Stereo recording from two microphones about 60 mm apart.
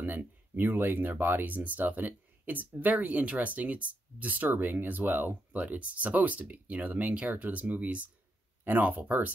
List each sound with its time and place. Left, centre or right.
0.0 s speech: right